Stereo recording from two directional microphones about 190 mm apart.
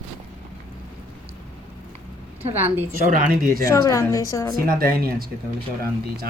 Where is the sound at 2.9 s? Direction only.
45° right (ahead or behind).